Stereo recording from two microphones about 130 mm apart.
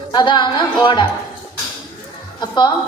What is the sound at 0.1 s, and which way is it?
Speech, 35° left (ahead or behind).